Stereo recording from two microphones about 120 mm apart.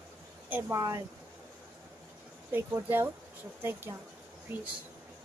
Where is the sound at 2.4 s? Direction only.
15° right (ahead or behind).